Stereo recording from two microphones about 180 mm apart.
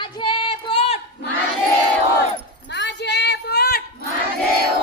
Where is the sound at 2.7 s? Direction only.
75° left (ahead or behind).